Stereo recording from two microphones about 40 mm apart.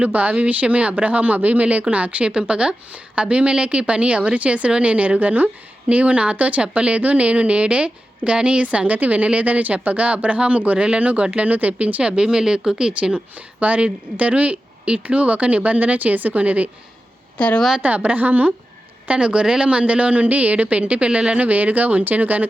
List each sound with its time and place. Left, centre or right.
0.0 s speech: right
12.1 s speech: centre; by 16.6 s right
17.3 s a woman's voice: left
17.8 s a woman's voice: right
19.0 s speech: right
21.3 s speech: right